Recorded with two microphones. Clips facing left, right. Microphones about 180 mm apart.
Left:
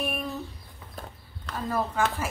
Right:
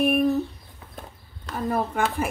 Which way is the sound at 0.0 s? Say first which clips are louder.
Right 11 dB; 60° right (ahead or behind).